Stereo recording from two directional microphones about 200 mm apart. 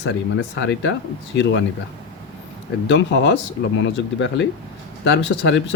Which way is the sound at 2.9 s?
65° left (ahead or behind).